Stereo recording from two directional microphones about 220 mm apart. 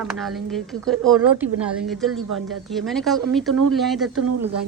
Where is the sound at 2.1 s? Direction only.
90° right.